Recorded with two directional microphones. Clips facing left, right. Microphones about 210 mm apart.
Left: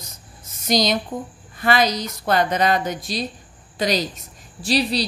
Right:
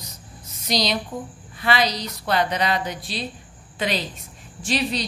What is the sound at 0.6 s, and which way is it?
A woman's voice, 45° left (ahead or behind).